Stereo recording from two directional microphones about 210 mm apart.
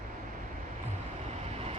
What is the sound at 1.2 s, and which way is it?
Vehicle, 30° right (ahead or behind).